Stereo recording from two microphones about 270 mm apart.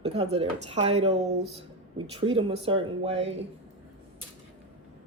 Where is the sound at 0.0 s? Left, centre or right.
Right.